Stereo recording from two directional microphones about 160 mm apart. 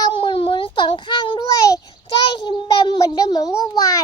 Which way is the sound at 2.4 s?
25° left (ahead or behind).